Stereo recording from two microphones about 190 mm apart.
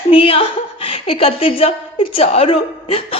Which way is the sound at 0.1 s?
30° left (ahead or behind).